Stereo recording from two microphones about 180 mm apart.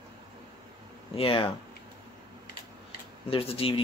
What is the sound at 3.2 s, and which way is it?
Speech, 30° left (ahead or behind).